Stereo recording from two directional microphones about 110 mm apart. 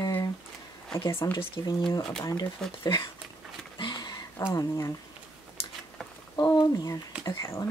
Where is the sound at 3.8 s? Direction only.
45° left (ahead or behind).